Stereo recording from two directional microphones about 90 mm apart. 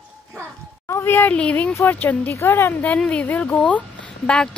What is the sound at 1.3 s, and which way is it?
Speech, 15° left (ahead or behind).